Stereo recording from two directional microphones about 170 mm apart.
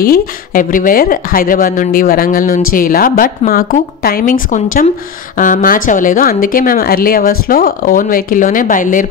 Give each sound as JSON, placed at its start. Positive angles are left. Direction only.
{"t": 0.0, "sound": "speech", "side_deg": 60}